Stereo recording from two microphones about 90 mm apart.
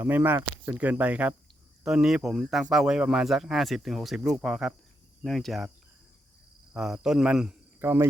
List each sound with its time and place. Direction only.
0.0 s speech: 20° right (ahead or behind)
0.8 s speech: 15° right (ahead or behind)
1.8 s speech: 5° right (ahead or behind)
6.7 s speech: 10° right (ahead or behind)
7.8 s speech: 25° right (ahead or behind)